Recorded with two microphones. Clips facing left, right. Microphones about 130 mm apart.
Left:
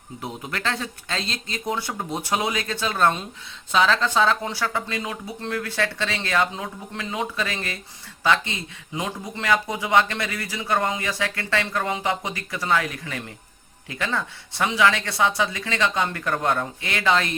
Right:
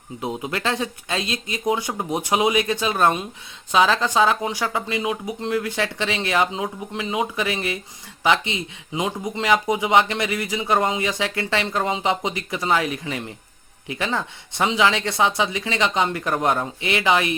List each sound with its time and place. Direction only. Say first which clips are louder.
0.2 s speech: right 5 dB; 20° right (ahead or behind)